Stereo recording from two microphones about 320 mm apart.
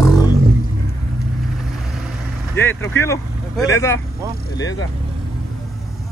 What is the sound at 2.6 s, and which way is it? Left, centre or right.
Speech, centre.